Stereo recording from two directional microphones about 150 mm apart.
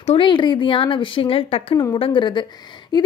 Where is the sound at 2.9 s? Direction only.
25° left (ahead or behind).